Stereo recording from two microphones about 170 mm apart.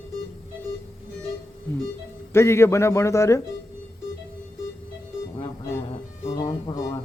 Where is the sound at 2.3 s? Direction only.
15° left (ahead or behind).